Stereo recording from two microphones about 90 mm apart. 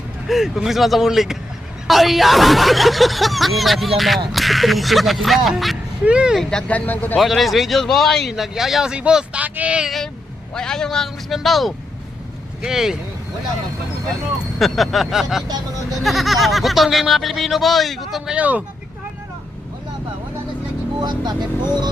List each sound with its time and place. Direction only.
0.3 s a man's voice: centre (ahead or behind)
6.4 s speech: 10° left (ahead or behind)
7.2 s a man's voice: centre (ahead or behind)
10.5 s a man's voice: 5° left (ahead or behind)
14.6 s a man's voice: centre (ahead or behind)
18.3 s speech: 15° right (ahead or behind)
21.0 s speech: 50° right (ahead or behind)